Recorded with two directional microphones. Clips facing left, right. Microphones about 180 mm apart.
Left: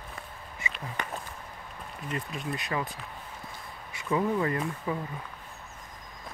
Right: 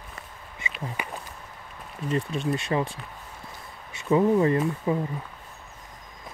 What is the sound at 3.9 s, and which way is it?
Speech, 25° right (ahead or behind).